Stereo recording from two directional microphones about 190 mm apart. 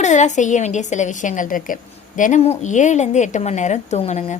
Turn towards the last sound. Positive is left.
turn(degrees=35)  # may be behind; listen again after turning